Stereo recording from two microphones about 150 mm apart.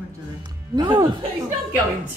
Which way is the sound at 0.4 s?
30° right (ahead or behind).